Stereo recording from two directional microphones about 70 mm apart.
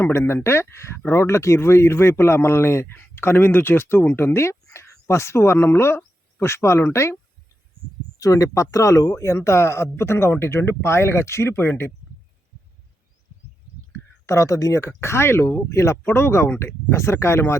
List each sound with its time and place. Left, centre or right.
0.0 s speech: left
8.2 s speech: left
14.3 s speech: left